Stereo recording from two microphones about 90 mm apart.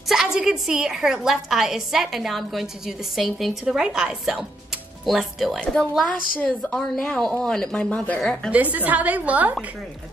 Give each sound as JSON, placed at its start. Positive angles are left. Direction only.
{"t": 0.1, "sound": "a woman's voice", "side_deg": -5}
{"t": 8.5, "sound": "a woman's voice", "side_deg": -15}